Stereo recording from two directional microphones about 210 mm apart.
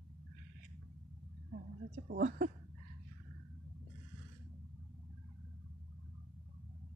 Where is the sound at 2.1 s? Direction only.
40° right (ahead or behind).